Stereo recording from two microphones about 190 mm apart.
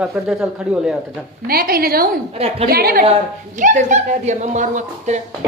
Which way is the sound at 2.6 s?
50° right (ahead or behind).